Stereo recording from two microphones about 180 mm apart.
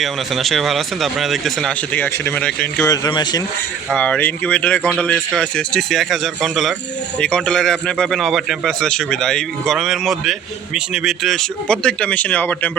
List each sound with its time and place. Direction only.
0.0 s a man's voice: centre (ahead or behind)
2.8 s speech: 20° left (ahead or behind)
3.8 s a man's voice: 5° left (ahead or behind)